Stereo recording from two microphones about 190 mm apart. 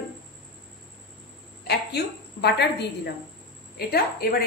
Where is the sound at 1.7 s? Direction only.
60° left (ahead or behind).